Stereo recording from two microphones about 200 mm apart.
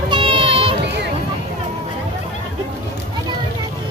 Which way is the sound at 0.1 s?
25° right (ahead or behind).